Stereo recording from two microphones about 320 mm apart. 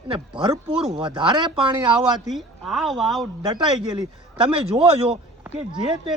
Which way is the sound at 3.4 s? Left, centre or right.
Centre.